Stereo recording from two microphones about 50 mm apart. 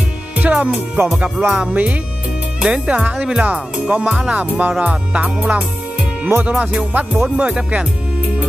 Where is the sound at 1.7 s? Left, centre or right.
Right.